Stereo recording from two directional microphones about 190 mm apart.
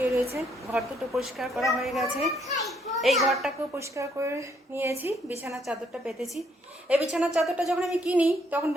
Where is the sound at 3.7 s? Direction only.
15° right (ahead or behind).